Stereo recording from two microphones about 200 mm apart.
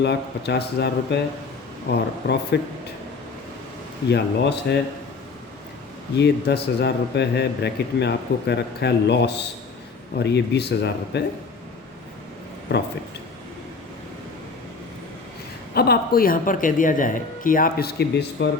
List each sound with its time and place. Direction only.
0.0 s a man's voice: 55° left (ahead or behind)
4.1 s a man's voice: 60° left (ahead or behind)
6.1 s a man's voice: 55° left (ahead or behind)
12.7 s a man's voice: 55° left (ahead or behind)
15.7 s a woman's voice: 50° left (ahead or behind)